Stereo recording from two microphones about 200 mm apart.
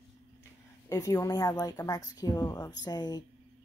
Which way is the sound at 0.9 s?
15° left (ahead or behind).